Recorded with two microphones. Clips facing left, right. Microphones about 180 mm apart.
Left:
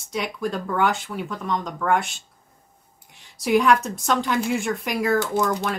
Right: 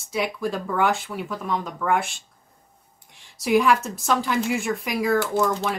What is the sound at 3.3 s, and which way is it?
Speech, centre (ahead or behind).